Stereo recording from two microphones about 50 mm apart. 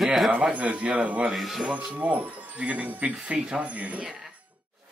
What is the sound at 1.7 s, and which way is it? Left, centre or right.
Speech, right.